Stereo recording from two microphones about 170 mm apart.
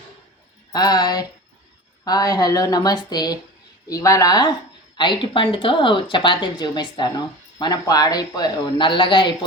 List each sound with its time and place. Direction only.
0.7 s speech: 25° left (ahead or behind)